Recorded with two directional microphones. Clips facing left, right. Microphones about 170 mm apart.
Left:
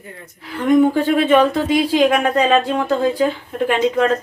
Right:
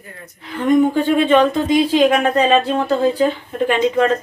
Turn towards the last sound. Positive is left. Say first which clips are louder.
# right 1 dB
turn(degrees=0)  # may be behind; listen again after turning